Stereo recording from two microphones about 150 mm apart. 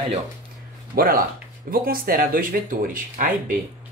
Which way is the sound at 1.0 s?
75° right (ahead or behind).